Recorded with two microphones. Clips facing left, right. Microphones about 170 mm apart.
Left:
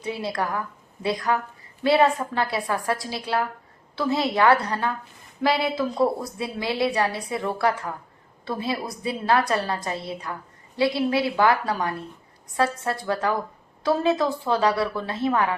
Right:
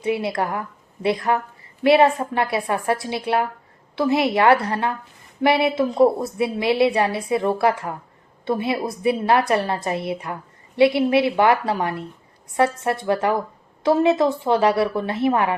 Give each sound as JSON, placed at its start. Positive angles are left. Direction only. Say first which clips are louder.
{"t": 0.2, "sound": "a woman's voice", "louder": "right 3 dB", "side_deg": -25}